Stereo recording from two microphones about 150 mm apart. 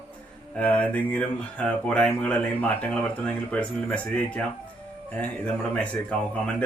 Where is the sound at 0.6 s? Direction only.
10° left (ahead or behind).